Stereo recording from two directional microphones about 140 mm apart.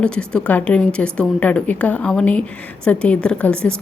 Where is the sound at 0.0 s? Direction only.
5° left (ahead or behind).